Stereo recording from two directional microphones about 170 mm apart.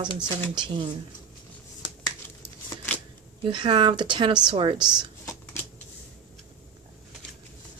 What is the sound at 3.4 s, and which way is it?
Speech, 30° right (ahead or behind).